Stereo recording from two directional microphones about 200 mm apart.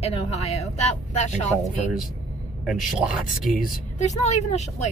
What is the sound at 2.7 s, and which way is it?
Speech, centre (ahead or behind).